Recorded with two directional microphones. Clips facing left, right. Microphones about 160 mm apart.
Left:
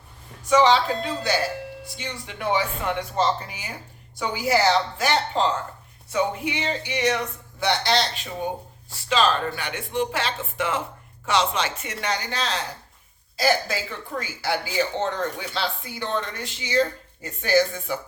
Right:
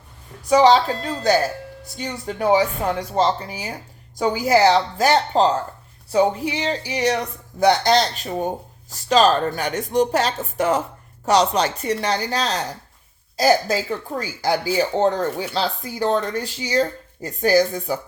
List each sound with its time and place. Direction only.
0.4 s speech: 40° right (ahead or behind)